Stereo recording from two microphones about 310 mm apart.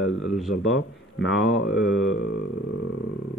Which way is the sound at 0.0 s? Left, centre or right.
Left.